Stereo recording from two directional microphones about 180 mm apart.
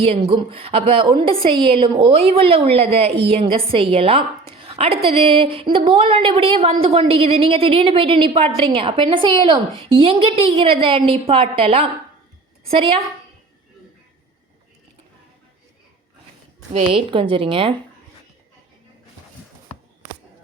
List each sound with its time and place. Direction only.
0.0 s a woman's voice: 30° right (ahead or behind)
4.6 s a sound: 30° right (ahead or behind)
5.0 s a woman's voice: 30° right (ahead or behind)
16.7 s a woman's voice: 30° right (ahead or behind)